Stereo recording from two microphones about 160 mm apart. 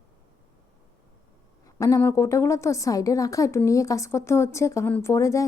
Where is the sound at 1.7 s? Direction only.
20° left (ahead or behind).